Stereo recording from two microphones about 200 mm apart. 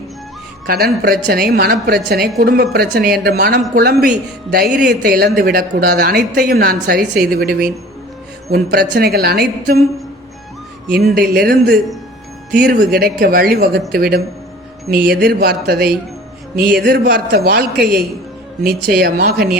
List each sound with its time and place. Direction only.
0.7 s speech: 50° right (ahead or behind)
10.9 s speech: 50° right (ahead or behind)
12.5 s speech: 45° right (ahead or behind)